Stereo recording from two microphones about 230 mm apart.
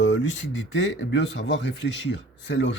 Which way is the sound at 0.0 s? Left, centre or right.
Left.